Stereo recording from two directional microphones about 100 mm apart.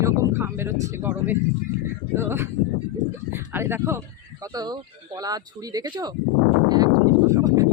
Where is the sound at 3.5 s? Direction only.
20° right (ahead or behind).